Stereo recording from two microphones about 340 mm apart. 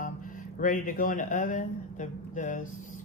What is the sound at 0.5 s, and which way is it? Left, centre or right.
Speech, left.